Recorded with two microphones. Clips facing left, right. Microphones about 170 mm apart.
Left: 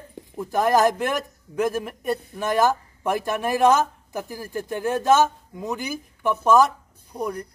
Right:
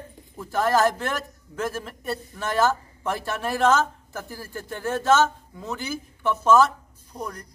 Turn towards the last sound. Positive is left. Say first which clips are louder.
# left 5 dB
turn(degrees=10)  # may be behind; listen again after turning